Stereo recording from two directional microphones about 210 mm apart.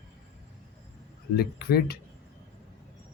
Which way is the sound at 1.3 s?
50° left (ahead or behind).